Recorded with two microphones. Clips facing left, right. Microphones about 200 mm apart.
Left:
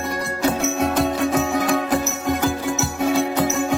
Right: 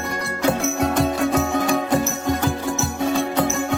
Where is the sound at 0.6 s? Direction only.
Centre (ahead or behind).